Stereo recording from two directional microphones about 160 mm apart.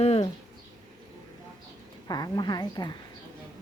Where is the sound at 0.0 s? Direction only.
40° left (ahead or behind).